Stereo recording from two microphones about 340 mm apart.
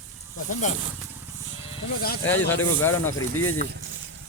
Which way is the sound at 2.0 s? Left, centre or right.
Left.